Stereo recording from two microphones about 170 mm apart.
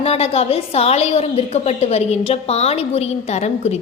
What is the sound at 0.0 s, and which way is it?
A woman's voice, 35° left (ahead or behind).